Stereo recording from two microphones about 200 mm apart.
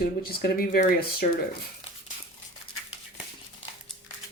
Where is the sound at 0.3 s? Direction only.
50° left (ahead or behind).